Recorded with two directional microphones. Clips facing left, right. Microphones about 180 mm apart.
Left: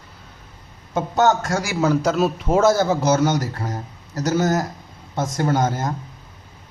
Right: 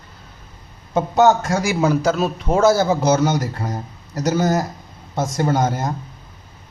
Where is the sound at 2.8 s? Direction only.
15° right (ahead or behind).